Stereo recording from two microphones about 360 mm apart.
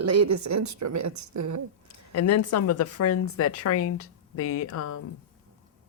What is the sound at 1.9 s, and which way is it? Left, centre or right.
Speech, left.